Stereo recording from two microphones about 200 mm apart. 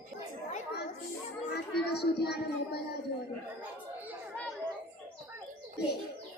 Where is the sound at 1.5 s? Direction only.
55° left (ahead or behind).